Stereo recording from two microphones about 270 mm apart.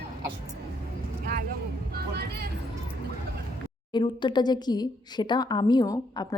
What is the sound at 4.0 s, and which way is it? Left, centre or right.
A woman's voice, centre.